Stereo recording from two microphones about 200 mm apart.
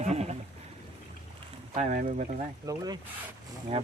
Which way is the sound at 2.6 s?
20° right (ahead or behind).